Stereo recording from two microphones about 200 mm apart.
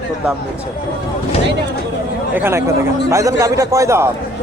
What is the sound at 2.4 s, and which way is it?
A man's voice, 15° right (ahead or behind).